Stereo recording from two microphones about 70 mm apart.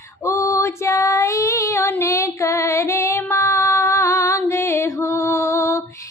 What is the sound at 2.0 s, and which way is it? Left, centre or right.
Child singing, left.